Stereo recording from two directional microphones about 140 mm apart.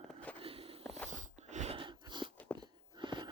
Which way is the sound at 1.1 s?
60° right (ahead or behind).